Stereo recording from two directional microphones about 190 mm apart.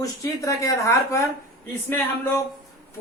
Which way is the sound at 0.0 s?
15° left (ahead or behind).